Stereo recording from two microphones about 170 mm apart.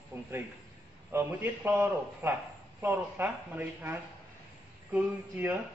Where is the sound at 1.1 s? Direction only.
10° right (ahead or behind).